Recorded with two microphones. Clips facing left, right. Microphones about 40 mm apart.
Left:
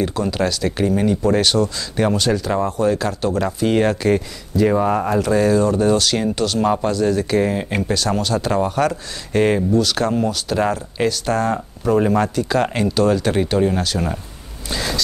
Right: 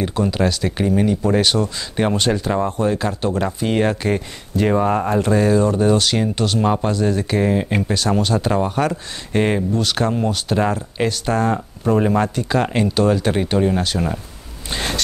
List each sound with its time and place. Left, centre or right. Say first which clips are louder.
0.0 s speech: right 1 dB; centre
3.5 s speech: left 2 dB; centre
6.6 s speech: left 1 dB; centre
6.9 s speech: left 2 dB; right
7.9 s speech: even; centre